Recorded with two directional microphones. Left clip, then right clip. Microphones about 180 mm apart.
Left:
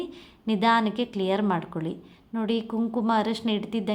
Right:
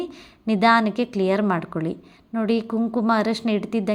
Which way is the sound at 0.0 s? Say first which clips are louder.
Right 4 dB; 25° right (ahead or behind).